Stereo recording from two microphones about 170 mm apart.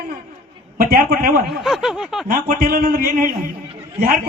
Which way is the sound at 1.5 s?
Centre (ahead or behind).